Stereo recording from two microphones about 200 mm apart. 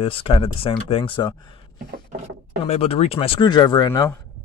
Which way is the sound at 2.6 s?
30° left (ahead or behind).